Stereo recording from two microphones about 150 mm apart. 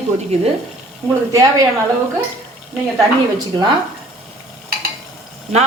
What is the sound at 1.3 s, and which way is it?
Speech, 25° right (ahead or behind).